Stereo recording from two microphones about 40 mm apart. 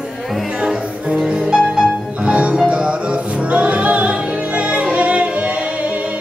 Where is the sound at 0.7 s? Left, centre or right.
Centre.